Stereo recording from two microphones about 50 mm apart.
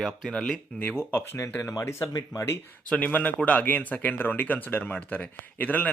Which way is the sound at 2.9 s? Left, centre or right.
Left.